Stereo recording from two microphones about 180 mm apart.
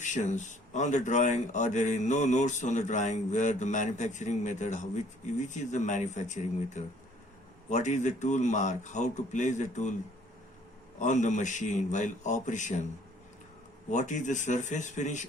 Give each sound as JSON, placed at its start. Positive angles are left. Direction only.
{"t": 0.0, "sound": "speech", "side_deg": 40}
{"t": 11.0, "sound": "a man's voice", "side_deg": 40}
{"t": 13.9, "sound": "a man's voice", "side_deg": 40}